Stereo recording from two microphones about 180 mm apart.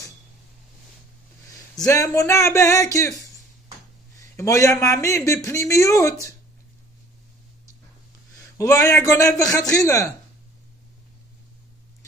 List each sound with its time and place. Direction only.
1.9 s speech: 15° left (ahead or behind)
4.4 s speech: 15° left (ahead or behind)
8.4 s a man's voice: 20° left (ahead or behind)